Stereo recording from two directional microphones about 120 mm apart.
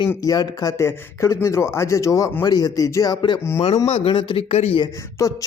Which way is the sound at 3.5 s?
60° left (ahead or behind).